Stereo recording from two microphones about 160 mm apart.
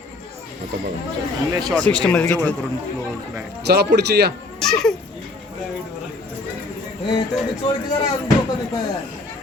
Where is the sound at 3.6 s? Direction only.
90° right.